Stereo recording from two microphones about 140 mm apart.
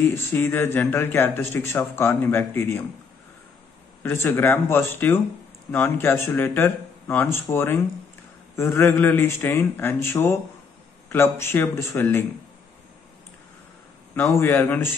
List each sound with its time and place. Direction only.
0.1 s speech: 15° left (ahead or behind)
4.0 s speech: 15° left (ahead or behind)
14.1 s speech: 15° left (ahead or behind)